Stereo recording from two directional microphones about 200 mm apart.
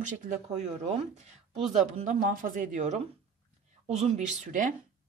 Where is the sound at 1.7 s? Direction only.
35° right (ahead or behind).